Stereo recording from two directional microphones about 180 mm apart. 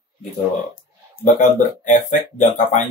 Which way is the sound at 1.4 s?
45° left (ahead or behind).